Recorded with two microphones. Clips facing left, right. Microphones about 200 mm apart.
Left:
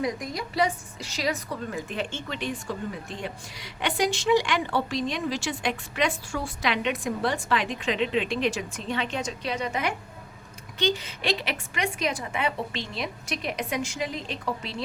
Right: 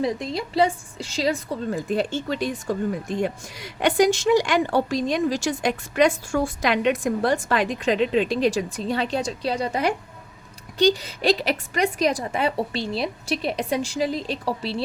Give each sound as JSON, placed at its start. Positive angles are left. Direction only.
{"t": 0.0, "sound": "a woman's voice", "side_deg": -25}